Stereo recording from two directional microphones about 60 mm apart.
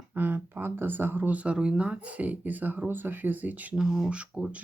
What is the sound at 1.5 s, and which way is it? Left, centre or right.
Speech, centre.